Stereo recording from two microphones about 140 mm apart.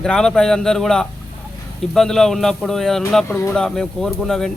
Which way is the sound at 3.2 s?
15° left (ahead or behind).